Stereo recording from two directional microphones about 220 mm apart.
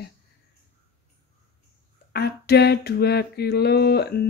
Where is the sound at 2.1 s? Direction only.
45° left (ahead or behind).